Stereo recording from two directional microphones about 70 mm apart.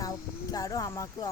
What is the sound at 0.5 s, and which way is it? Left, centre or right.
Speech, left.